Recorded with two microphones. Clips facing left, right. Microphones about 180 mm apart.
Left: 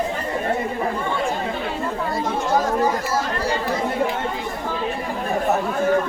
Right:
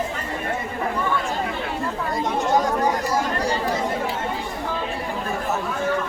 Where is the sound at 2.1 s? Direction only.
20° right (ahead or behind).